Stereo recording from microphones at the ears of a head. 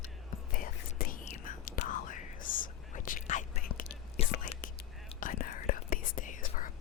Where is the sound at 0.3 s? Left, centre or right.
Left.